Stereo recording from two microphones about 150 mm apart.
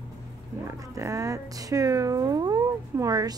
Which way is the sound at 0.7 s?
20° right (ahead or behind).